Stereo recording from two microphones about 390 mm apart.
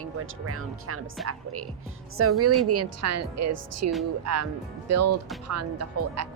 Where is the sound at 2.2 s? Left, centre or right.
Right.